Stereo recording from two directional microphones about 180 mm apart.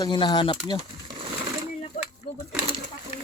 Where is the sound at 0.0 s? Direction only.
25° left (ahead or behind).